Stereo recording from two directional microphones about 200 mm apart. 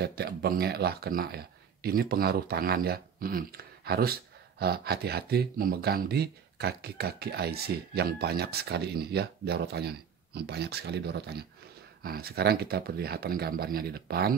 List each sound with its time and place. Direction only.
0.0 s speech: 55° right (ahead or behind)